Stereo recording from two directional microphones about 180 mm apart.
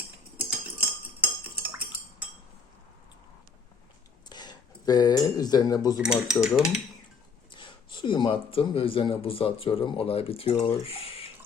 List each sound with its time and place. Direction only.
0.3 s cutlery: 10° right (ahead or behind)
4.3 s speech: 25° left (ahead or behind)
6.0 s speech: 5° right (ahead or behind)
7.5 s speech: 25° left (ahead or behind)